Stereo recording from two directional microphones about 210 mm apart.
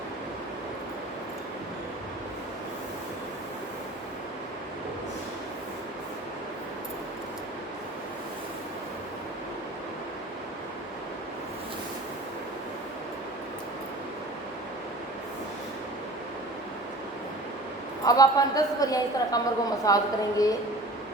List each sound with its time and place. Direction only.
18.0 s a woman's voice: 15° left (ahead or behind)